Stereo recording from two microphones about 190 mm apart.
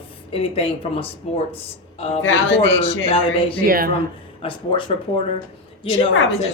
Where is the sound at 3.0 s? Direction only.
30° left (ahead or behind).